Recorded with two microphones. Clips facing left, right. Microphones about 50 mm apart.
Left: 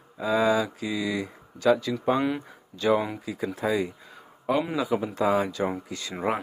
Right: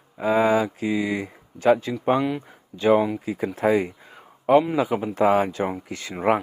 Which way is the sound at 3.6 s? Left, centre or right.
Right.